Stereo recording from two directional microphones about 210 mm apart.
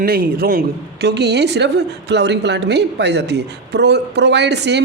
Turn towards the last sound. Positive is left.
turn(degrees=-55)  # may be behind; listen again after turning